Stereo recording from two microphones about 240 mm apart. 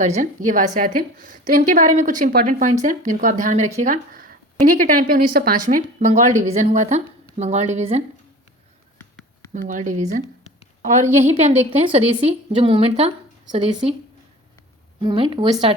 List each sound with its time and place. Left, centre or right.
0.0 s a woman's voice: right
9.0 s a sound: centre
9.5 s a woman's voice: right
15.0 s a woman's voice: right